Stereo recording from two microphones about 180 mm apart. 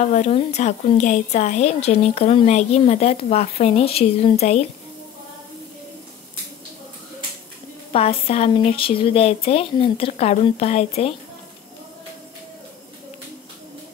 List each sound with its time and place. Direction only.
0.0 s speech: 40° left (ahead or behind)
7.9 s speech: 35° left (ahead or behind)